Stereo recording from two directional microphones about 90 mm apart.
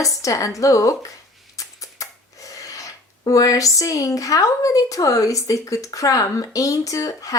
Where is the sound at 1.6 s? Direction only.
40° left (ahead or behind).